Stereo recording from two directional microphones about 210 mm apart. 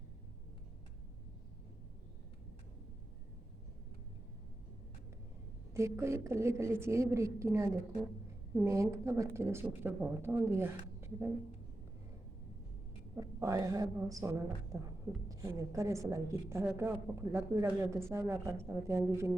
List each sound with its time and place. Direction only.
5.7 s a woman's voice: 15° right (ahead or behind)
13.1 s a woman's voice: 15° right (ahead or behind)